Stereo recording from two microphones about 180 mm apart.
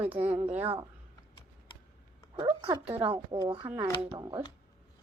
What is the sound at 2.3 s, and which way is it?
Speech, 25° right (ahead or behind).